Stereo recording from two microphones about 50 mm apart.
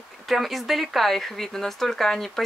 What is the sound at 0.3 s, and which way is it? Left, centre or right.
Speech, centre.